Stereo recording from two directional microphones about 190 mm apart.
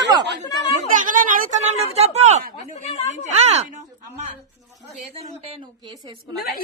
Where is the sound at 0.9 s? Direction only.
45° right (ahead or behind).